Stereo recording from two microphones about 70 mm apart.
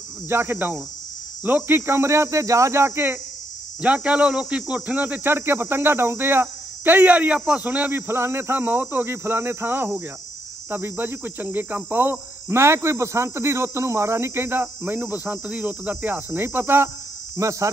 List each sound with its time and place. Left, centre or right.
0.3 s cricket: right
3.8 s a man's voice: centre
8.1 s cricket: right
17.4 s speech: right